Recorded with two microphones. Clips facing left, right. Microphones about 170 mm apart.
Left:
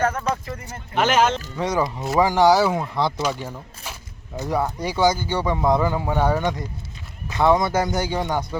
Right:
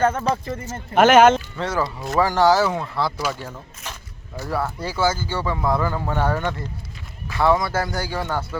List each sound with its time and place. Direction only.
0.0 s speech: 30° right (ahead or behind)
0.9 s speech: 55° right (ahead or behind)
1.5 s speech: 15° left (ahead or behind)
4.4 s speech: 20° left (ahead or behind)